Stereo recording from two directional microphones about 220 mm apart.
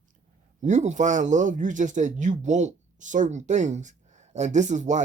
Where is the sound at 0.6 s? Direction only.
35° right (ahead or behind).